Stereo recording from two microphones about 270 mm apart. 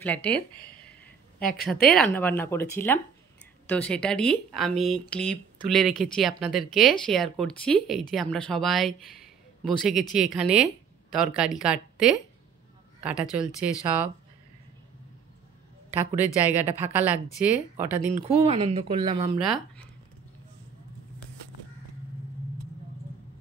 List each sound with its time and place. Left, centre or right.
0.0 s speech: centre
2.0 s speech: centre
13.5 s speech: centre
15.9 s speech: centre
18.1 s speech: right
19.4 s speech: centre